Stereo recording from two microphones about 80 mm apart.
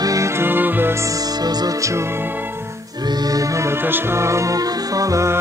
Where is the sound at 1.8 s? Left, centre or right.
Right.